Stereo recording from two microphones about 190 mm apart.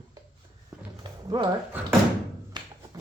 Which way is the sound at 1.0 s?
20° right (ahead or behind).